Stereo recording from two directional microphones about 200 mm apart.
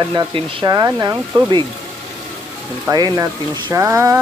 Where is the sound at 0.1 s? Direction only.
25° right (ahead or behind).